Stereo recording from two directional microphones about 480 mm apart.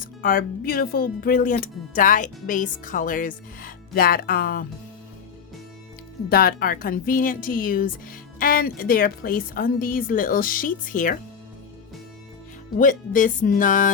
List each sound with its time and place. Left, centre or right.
0.0 s speech: centre
6.2 s speech: centre
12.7 s speech: centre